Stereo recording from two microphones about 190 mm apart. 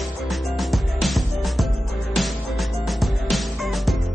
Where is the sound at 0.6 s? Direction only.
Centre (ahead or behind).